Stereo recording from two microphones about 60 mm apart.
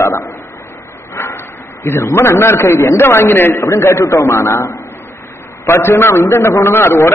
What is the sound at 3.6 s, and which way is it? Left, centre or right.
A man's voice, left.